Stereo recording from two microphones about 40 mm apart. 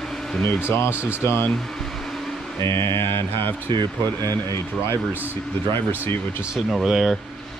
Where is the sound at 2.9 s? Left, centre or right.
Left.